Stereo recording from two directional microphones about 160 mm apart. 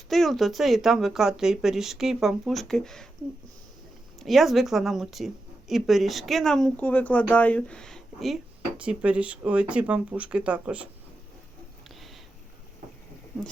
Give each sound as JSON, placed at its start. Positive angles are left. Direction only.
{"t": 0.1, "sound": "speech", "side_deg": 0}
{"t": 4.2, "sound": "speech", "side_deg": 0}